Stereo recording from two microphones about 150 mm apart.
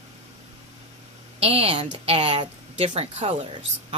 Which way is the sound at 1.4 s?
40° right (ahead or behind).